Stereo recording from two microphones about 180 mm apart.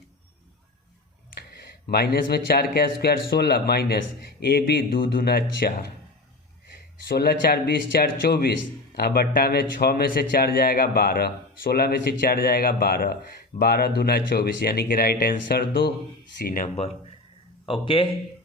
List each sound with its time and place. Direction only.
1.4 s speech: 60° left (ahead or behind)
16.6 s speech: 35° left (ahead or behind)